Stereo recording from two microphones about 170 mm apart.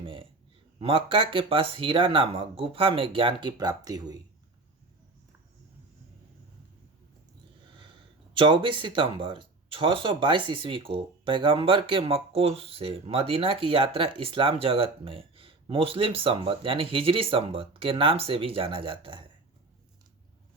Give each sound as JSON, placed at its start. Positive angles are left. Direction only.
{"t": 0.0, "sound": "a sound", "side_deg": -30}
{"t": 0.8, "sound": "speech", "side_deg": -35}
{"t": 8.3, "sound": "speech", "side_deg": -30}